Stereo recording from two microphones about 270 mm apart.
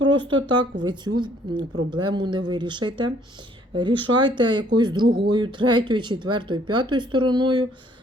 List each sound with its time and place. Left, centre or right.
0.0 s speech: centre